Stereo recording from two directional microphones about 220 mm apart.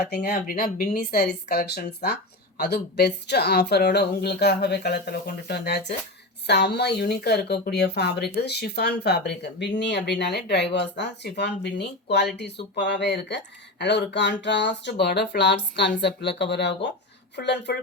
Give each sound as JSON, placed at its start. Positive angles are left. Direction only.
{"t": 0.0, "sound": "speech", "side_deg": 45}